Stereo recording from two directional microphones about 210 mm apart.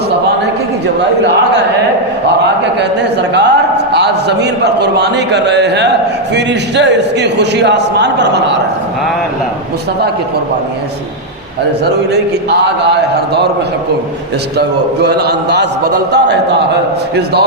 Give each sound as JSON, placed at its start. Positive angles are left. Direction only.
{"t": 3.0, "sound": "a man's voice", "side_deg": -55}
{"t": 12.1, "sound": "a man's voice", "side_deg": -50}
{"t": 15.0, "sound": "a man's voice", "side_deg": -50}